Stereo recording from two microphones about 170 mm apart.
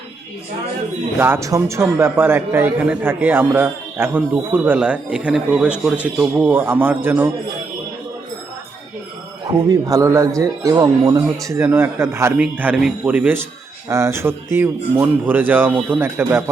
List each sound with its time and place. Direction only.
1.2 s a man's voice: 15° right (ahead or behind)
9.6 s a man's voice: 20° right (ahead or behind)